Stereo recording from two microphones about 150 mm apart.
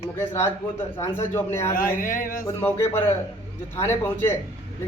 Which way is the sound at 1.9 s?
70° left (ahead or behind).